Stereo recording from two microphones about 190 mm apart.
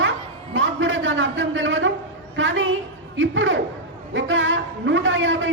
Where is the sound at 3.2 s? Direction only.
80° right.